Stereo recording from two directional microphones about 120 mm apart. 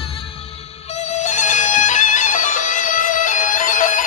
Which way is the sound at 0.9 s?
70° left (ahead or behind).